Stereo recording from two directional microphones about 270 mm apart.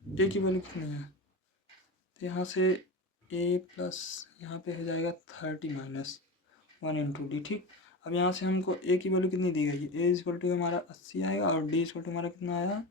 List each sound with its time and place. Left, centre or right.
0.2 s speech: left
2.1 s speech: left